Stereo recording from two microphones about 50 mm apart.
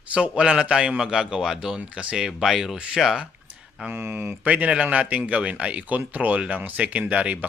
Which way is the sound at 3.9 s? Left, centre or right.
Right.